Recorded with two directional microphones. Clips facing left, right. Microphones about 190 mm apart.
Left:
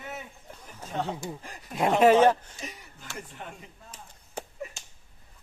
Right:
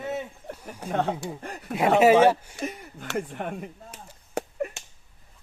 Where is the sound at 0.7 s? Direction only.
65° right (ahead or behind).